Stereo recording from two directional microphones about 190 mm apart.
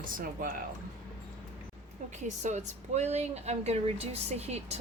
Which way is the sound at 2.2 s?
40° right (ahead or behind).